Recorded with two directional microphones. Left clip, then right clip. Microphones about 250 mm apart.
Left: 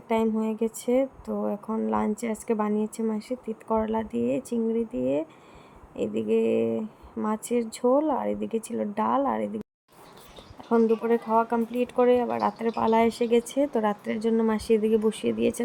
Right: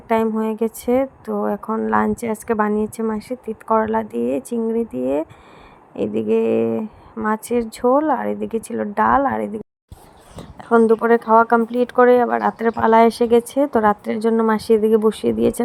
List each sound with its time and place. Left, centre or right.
0.3 s speech: centre
10.7 s a woman's voice: right